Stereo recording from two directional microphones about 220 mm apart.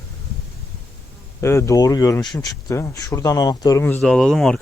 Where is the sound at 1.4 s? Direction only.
15° left (ahead or behind).